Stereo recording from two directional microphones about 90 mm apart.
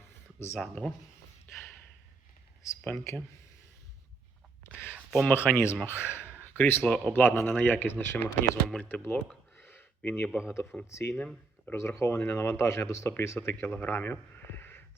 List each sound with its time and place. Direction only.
0.3 s speech: 30° left (ahead or behind)
0.6 s speech: 5° left (ahead or behind)
2.8 s speech: 30° left (ahead or behind)
5.3 s speech: 25° left (ahead or behind)
6.4 s a sound: 20° left (ahead or behind)
6.8 s speech: 10° left (ahead or behind)
7.1 s speech: 25° left (ahead or behind)
9.6 s a sound: 25° left (ahead or behind)
10.5 s speech: 30° left (ahead or behind)
11.2 s speech: 5° left (ahead or behind)
11.8 s speech: 30° left (ahead or behind)
13.6 s a sound: 20° left (ahead or behind)